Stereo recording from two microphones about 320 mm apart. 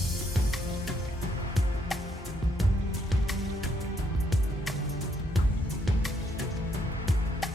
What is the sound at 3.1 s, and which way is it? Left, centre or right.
Music, centre.